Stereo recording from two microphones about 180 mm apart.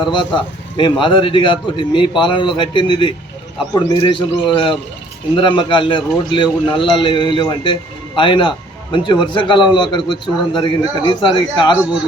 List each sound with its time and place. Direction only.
0.0 s a man's voice: 25° left (ahead or behind)